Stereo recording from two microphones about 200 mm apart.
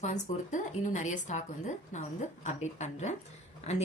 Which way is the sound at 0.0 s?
35° left (ahead or behind).